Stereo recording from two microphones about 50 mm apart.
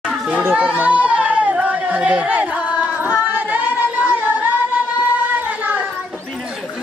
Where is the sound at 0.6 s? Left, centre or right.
Right.